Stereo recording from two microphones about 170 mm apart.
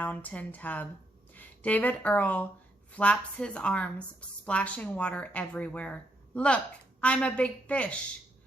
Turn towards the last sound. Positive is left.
turn(degrees=10)  # may be behind; listen again after turning